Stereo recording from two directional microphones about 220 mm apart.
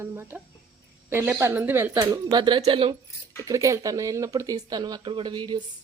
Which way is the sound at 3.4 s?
15° right (ahead or behind).